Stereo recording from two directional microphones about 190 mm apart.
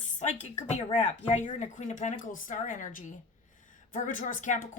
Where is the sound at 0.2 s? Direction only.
40° left (ahead or behind).